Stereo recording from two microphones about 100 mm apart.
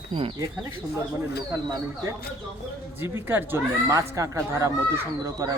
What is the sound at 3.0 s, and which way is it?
A man's voice, 25° right (ahead or behind).